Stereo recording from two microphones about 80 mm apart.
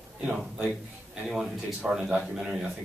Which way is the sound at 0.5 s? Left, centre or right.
Centre.